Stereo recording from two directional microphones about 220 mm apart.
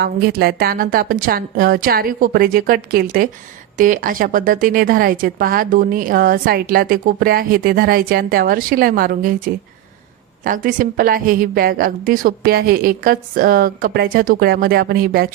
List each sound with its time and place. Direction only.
0.0 s a woman's voice: 45° right (ahead or behind)
10.4 s a woman's voice: 40° right (ahead or behind)